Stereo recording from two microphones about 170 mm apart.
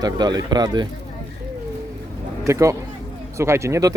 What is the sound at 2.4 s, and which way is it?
Speech, 20° right (ahead or behind).